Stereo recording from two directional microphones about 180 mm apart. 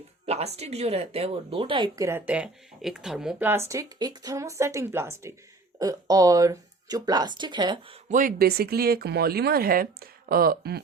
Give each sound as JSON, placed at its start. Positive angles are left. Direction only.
{"t": 0.3, "sound": "speech", "side_deg": -35}
{"t": 8.1, "sound": "speech", "side_deg": -50}